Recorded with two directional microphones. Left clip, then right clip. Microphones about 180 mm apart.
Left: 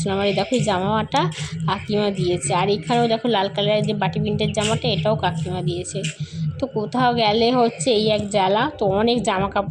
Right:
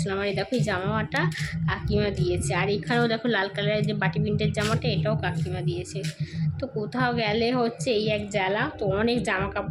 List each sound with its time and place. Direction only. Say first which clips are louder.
0.0 s a woman's voice: left 7 dB; 20° left (ahead or behind)
6.6 s speech: left 7 dB; 20° left (ahead or behind)